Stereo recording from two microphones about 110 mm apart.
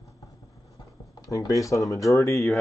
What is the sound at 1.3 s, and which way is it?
Speech, 30° left (ahead or behind).